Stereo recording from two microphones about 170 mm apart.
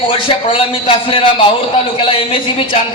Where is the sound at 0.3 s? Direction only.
30° left (ahead or behind).